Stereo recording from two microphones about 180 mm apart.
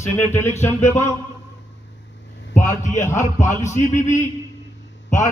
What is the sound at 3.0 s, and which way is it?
Speech, 15° left (ahead or behind).